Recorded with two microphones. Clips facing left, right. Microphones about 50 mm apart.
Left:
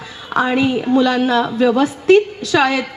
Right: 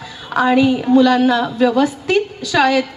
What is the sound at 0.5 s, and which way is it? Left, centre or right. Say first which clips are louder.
Speech: right 4 dB; left.